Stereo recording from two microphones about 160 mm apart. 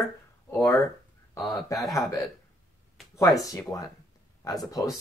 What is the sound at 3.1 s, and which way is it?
Speech, 20° left (ahead or behind).